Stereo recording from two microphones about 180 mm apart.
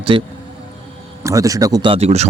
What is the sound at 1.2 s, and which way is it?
Speech, 20° right (ahead or behind).